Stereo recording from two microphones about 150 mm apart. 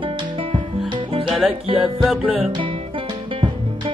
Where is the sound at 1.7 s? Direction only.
Centre (ahead or behind).